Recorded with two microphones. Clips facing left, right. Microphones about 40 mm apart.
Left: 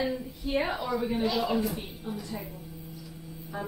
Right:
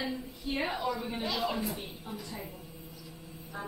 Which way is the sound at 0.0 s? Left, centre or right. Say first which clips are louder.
Left 5 dB; centre.